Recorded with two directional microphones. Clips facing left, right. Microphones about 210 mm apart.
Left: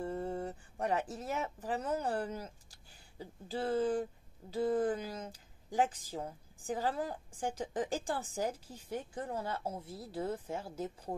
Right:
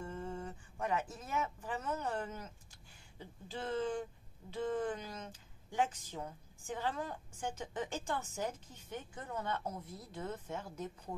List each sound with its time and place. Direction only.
0.0 s speech: 35° left (ahead or behind)